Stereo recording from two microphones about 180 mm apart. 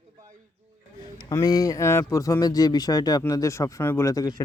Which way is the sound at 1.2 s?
20° left (ahead or behind).